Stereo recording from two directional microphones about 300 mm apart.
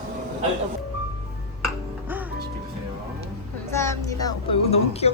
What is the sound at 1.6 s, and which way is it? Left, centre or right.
Music, centre.